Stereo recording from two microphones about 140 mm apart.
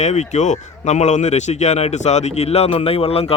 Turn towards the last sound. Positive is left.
turn(degrees=45)  # may be behind; listen again after turning